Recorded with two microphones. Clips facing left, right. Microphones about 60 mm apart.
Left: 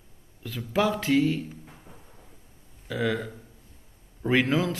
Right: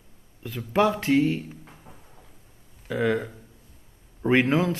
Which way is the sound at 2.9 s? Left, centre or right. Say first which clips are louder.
Right 3 dB; centre.